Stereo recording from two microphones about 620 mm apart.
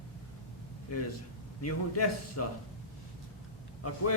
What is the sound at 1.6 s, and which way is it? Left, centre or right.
Speech, left.